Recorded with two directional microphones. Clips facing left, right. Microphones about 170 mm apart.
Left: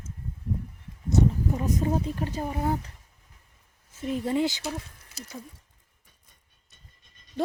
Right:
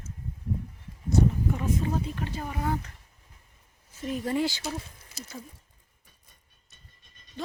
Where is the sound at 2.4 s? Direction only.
25° left (ahead or behind).